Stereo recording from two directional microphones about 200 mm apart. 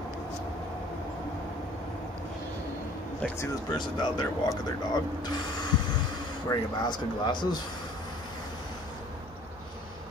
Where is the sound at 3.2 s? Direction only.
5° left (ahead or behind).